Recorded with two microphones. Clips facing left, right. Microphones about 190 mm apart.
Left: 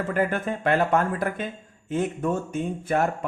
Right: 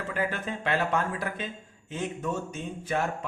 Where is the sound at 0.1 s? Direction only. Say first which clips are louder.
Left 5 dB; 50° left (ahead or behind).